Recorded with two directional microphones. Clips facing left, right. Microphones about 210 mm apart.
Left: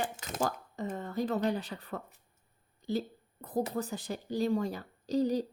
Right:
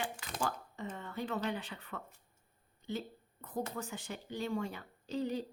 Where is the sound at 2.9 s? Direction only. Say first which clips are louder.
Left 7 dB; 35° left (ahead or behind).